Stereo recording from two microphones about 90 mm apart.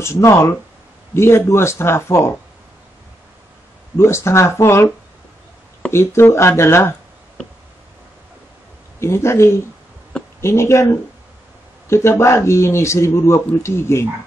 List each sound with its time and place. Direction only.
0.0 s speech: 30° left (ahead or behind)
4.0 s speech: 30° left (ahead or behind)
9.0 s speech: 30° left (ahead or behind)
11.9 s speech: 30° left (ahead or behind)